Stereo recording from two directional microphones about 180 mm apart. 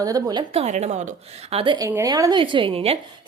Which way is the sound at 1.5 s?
30° right (ahead or behind).